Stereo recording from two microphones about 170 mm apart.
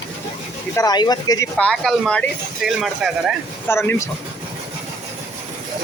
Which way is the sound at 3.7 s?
15° left (ahead or behind).